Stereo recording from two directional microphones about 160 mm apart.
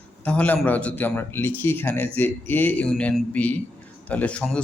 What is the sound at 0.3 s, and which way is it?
A man's voice, 10° left (ahead or behind).